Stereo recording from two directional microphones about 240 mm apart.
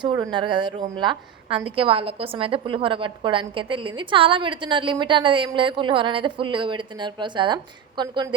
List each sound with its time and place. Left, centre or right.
0.0 s a woman's voice: centre